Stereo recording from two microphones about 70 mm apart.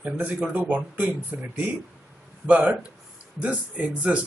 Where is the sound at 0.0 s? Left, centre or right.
Right.